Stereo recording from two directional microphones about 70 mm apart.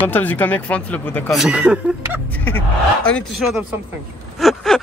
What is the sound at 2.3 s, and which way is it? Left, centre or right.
Speech, left.